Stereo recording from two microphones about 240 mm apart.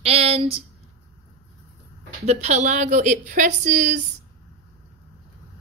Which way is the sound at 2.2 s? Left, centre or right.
Right.